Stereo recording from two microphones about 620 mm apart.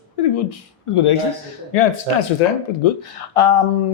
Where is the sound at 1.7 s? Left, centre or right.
Left.